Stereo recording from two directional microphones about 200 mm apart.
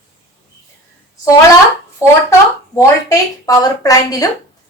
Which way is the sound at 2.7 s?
15° left (ahead or behind).